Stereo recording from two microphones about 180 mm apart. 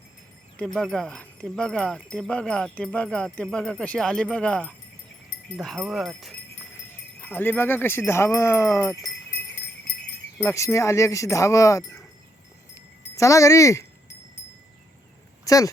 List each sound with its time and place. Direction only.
0.5 s speech: 5° left (ahead or behind)
7.2 s speech: 10° left (ahead or behind)
12.7 s wind chime: 15° left (ahead or behind)
15.4 s speech: 20° left (ahead or behind)